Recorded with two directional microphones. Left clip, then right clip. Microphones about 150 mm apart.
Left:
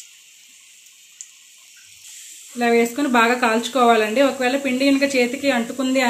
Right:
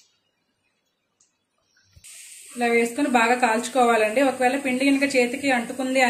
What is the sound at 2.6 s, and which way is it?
Speech, 55° left (ahead or behind).